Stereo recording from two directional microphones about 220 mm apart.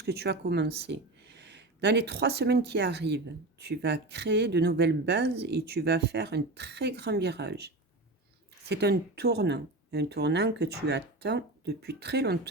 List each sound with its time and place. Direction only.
0.0 s speech: 50° right (ahead or behind)